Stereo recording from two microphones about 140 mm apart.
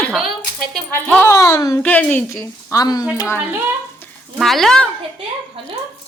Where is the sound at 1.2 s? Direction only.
20° left (ahead or behind).